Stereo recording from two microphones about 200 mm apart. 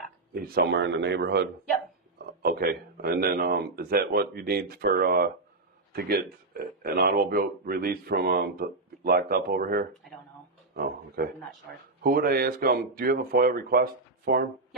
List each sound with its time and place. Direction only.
0.3 s a man's voice: 50° right (ahead or behind)